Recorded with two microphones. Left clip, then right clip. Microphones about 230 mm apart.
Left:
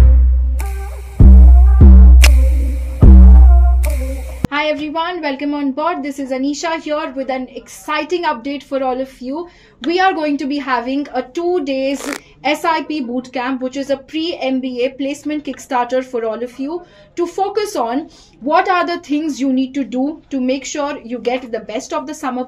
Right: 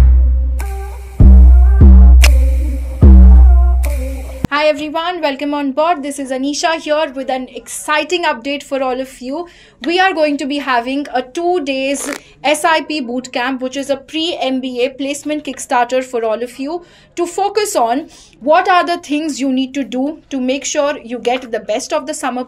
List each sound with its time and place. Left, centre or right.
1.1 s music: centre
4.5 s a woman's voice: right